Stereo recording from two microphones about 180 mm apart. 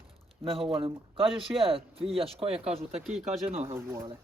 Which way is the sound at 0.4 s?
30° right (ahead or behind).